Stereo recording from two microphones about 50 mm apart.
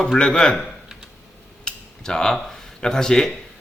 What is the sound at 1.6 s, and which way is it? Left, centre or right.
Tick-tock, centre.